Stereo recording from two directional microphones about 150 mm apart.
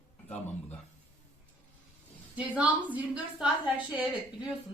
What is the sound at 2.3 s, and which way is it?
A woman's voice, 10° right (ahead or behind).